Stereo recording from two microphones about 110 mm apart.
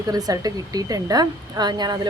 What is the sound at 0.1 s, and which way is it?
Speech, 35° right (ahead or behind).